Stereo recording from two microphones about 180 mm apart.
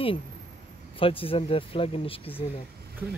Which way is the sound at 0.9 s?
30° left (ahead or behind).